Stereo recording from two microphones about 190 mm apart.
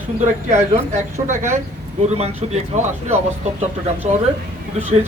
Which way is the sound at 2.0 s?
35° right (ahead or behind).